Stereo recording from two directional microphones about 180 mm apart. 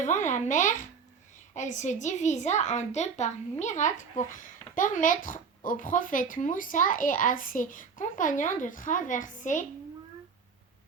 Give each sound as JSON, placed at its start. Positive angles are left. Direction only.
{"t": 0.0, "sound": "a child's voice", "side_deg": 45}